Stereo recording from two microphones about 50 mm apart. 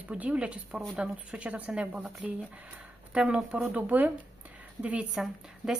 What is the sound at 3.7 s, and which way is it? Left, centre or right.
Speech, right.